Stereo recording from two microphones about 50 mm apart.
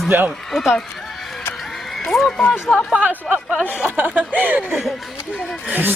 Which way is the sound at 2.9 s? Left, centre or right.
Right.